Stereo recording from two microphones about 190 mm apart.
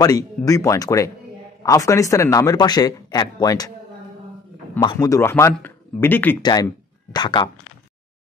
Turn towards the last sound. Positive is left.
turn(degrees=25)  # may be behind; listen again after turning